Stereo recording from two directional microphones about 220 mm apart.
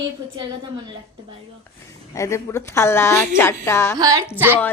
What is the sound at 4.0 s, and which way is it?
Speech, 15° right (ahead or behind).